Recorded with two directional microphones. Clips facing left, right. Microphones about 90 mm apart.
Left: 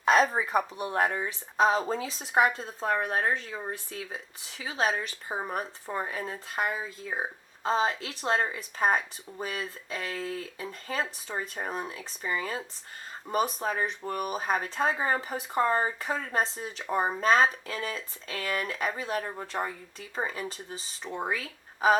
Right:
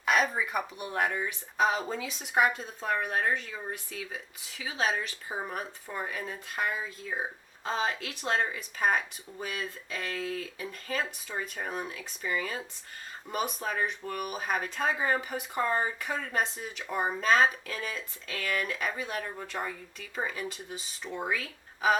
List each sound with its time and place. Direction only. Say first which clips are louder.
0.0 s speech: left 4 dB; 35° left (ahead or behind)